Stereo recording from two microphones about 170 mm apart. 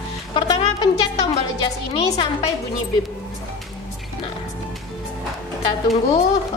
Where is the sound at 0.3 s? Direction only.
30° left (ahead or behind).